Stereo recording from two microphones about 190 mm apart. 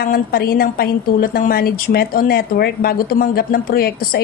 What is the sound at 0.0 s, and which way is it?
A woman's voice, 50° left (ahead or behind).